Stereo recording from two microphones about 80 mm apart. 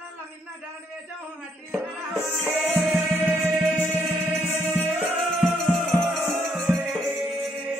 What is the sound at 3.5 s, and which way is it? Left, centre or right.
Music, centre.